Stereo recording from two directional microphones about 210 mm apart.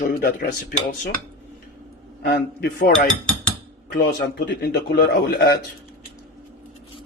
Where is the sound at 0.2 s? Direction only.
45° left (ahead or behind).